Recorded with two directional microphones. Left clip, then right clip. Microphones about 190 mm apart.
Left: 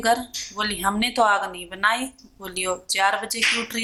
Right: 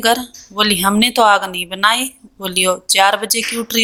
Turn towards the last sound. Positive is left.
turn(degrees=-40)  # may be behind; listen again after turning